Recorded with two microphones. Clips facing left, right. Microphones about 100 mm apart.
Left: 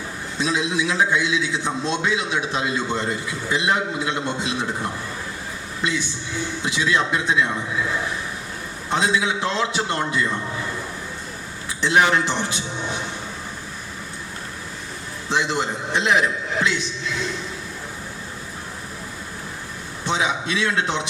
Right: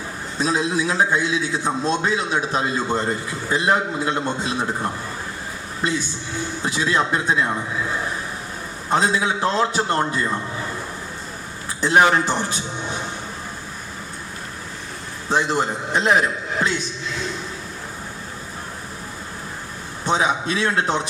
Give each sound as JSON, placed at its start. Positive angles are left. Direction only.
{"t": 0.3, "sound": "a man's voice", "side_deg": -40}
{"t": 8.9, "sound": "a man's voice", "side_deg": -40}
{"t": 11.8, "sound": "a man's voice", "side_deg": -40}
{"t": 15.3, "sound": "a man's voice", "side_deg": -40}
{"t": 20.1, "sound": "a man's voice", "side_deg": -40}